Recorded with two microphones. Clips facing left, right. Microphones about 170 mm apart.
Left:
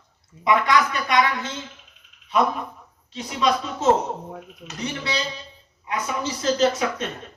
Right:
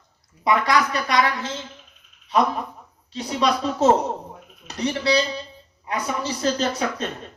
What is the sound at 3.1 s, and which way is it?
Speech, 35° right (ahead or behind).